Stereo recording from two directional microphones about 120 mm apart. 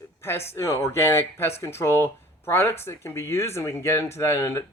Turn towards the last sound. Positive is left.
turn(degrees=20)  # may be behind; listen again after turning